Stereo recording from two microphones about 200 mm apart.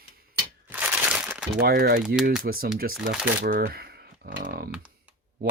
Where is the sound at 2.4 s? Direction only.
45° right (ahead or behind).